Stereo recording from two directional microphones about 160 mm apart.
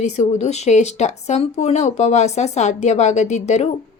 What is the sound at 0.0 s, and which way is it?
Speech, 45° left (ahead or behind).